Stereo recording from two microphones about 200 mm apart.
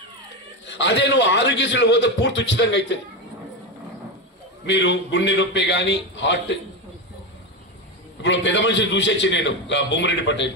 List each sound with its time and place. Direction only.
0.7 s a man's voice: 65° left (ahead or behind)
4.6 s a man's voice: 65° left (ahead or behind)
8.2 s a man's voice: 65° left (ahead or behind)